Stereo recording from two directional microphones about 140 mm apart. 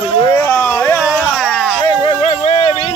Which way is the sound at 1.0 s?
Centre (ahead or behind).